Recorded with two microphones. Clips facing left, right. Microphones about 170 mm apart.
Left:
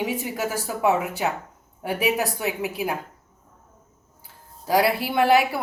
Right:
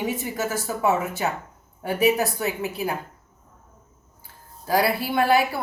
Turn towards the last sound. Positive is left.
turn(degrees=20)  # may be behind; listen again after turning